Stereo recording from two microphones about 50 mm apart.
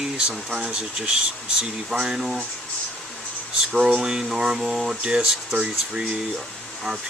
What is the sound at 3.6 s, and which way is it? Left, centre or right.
Speech, centre.